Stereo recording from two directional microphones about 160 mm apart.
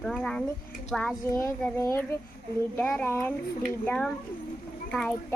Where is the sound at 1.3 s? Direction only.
20° left (ahead or behind).